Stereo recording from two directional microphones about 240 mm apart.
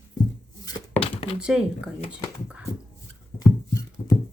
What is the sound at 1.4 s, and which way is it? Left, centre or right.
Speech, centre.